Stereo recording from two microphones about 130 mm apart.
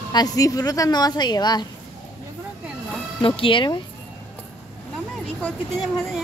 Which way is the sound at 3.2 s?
40° left (ahead or behind).